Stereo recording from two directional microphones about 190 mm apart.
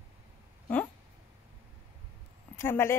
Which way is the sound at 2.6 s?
10° left (ahead or behind).